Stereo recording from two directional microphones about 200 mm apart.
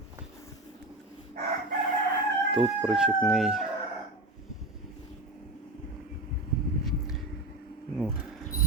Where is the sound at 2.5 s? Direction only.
Centre (ahead or behind).